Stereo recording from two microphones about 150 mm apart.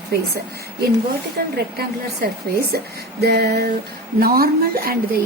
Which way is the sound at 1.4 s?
75° right (ahead or behind).